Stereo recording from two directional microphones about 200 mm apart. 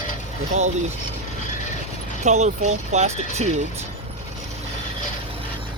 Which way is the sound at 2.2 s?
35° right (ahead or behind).